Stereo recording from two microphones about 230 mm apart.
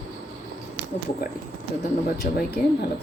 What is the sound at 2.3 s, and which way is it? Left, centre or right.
Speech, left.